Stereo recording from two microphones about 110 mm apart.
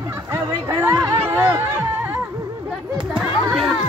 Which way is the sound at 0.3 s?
25° right (ahead or behind).